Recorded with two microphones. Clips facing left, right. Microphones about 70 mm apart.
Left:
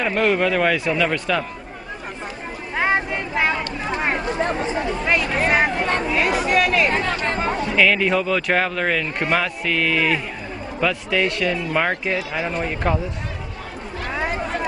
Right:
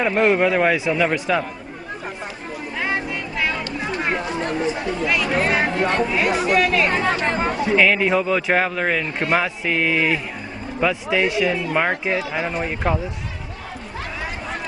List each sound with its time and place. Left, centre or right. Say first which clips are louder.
0.0 s a man's voice: right 2 dB; centre
2.7 s vehicle: left 4 dB; left
4.4 s chatter: left 1 dB; left
6.1 s speech: left 2 dB; centre
6.9 s chatter: right 2 dB; centre
7.8 s a man's voice: left 1 dB; centre